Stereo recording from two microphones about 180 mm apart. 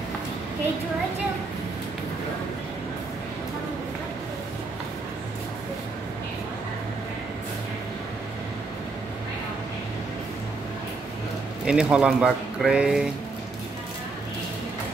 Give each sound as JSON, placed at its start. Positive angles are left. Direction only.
{"t": 11.6, "sound": "speech", "side_deg": -5}